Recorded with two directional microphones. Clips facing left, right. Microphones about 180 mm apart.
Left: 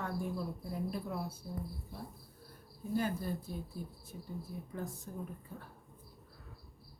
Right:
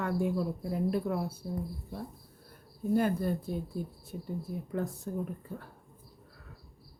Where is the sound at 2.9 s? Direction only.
60° right (ahead or behind).